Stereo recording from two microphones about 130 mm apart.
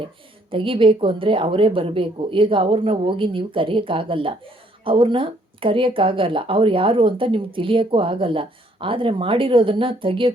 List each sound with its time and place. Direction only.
0.5 s speech: 40° right (ahead or behind)